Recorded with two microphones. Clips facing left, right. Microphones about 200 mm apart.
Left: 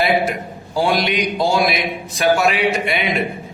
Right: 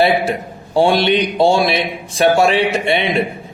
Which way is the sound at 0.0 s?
30° right (ahead or behind).